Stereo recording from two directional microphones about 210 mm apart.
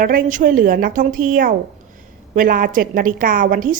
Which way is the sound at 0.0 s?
40° right (ahead or behind).